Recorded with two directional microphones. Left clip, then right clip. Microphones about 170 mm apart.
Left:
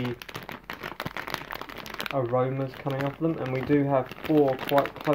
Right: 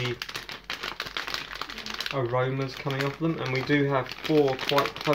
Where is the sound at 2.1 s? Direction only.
15° left (ahead or behind).